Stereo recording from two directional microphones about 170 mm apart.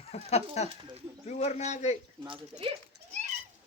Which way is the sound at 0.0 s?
40° left (ahead or behind).